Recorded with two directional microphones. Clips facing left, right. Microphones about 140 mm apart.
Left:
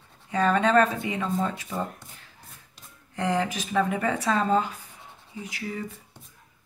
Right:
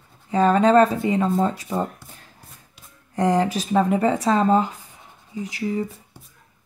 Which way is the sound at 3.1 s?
40° right (ahead or behind).